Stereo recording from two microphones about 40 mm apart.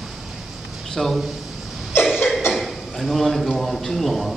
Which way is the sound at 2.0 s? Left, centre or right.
Centre.